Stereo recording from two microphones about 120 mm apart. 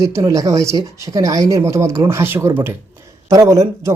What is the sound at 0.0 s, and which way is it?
A man's voice, 30° right (ahead or behind).